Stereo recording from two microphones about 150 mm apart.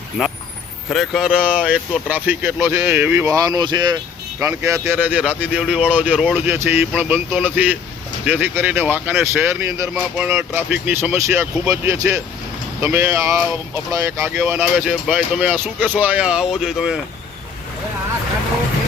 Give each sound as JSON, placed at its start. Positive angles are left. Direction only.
{"t": 0.2, "sound": "speech", "side_deg": 0}
{"t": 9.9, "sound": "speech", "side_deg": -5}